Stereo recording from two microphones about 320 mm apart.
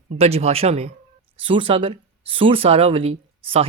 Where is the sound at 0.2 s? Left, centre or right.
Centre.